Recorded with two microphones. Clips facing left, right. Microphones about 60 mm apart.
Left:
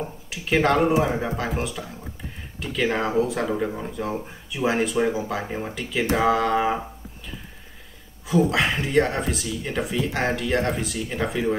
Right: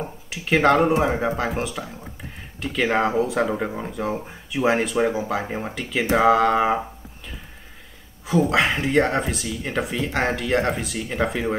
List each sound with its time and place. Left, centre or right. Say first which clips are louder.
0.3 s speech: right 3 dB; centre
3.4 s speech: even; right
3.9 s speech: right 2 dB; centre
5.8 s speech: right 3 dB; centre
8.3 s speech: right 1 dB; centre